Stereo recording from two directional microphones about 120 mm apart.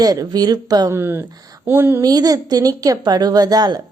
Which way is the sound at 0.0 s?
30° right (ahead or behind).